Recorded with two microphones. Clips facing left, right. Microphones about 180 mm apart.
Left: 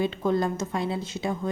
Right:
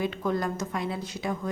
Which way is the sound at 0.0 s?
25° left (ahead or behind).